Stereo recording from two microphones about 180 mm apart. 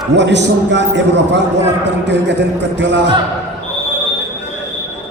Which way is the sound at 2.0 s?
75° right (ahead or behind).